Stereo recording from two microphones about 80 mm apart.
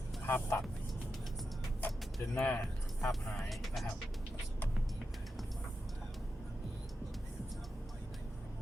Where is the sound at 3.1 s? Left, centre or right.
Centre.